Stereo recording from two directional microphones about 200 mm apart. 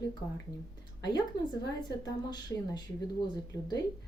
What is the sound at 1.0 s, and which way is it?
A woman's voice, 20° left (ahead or behind).